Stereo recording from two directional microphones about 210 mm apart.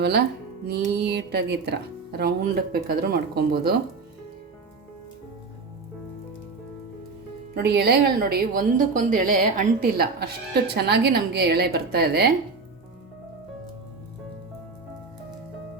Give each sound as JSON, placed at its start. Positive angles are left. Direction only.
{"t": 0.0, "sound": "a woman's voice", "side_deg": -50}
{"t": 7.5, "sound": "a woman's voice", "side_deg": -50}